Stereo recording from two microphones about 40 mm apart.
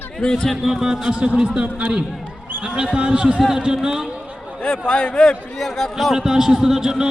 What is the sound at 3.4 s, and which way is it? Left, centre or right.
Speech, centre.